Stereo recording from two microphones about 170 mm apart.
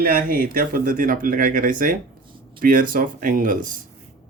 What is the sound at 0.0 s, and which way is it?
Speech, 55° right (ahead or behind).